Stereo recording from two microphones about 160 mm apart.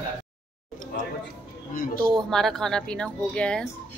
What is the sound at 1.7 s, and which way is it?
Speech, 60° left (ahead or behind).